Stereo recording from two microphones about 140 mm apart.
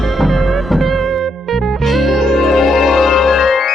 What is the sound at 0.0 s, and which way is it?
Music, centre (ahead or behind).